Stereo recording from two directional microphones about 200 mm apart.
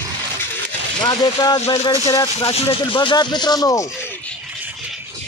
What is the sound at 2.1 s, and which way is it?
Speech, 15° left (ahead or behind).